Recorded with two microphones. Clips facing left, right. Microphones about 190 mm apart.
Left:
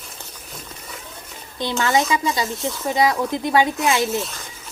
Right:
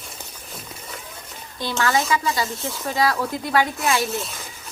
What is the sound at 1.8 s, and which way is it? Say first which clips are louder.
Speech: left 1 dB; 20° left (ahead or behind).